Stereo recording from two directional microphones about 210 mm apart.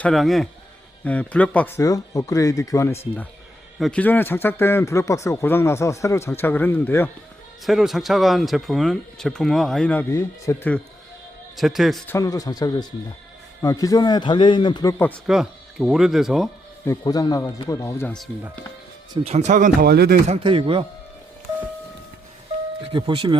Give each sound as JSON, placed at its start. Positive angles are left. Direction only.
{"t": 0.0, "sound": "a man's voice", "side_deg": 0}
{"t": 3.8, "sound": "a man's voice", "side_deg": 5}
{"t": 7.6, "sound": "speech", "side_deg": 0}
{"t": 11.5, "sound": "speech", "side_deg": 0}
{"t": 12.1, "sound": "a man's voice", "side_deg": 15}
{"t": 15.3, "sound": "speech", "side_deg": 0}
{"t": 16.8, "sound": "a man's voice", "side_deg": 15}
{"t": 19.1, "sound": "speech", "side_deg": -30}
{"t": 20.2, "sound": "speech", "side_deg": -30}
{"t": 22.8, "sound": "speech", "side_deg": -25}